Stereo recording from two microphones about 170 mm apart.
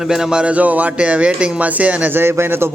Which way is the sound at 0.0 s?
Centre (ahead or behind).